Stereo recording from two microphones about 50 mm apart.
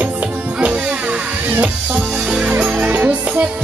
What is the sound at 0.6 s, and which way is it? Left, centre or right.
Music, right.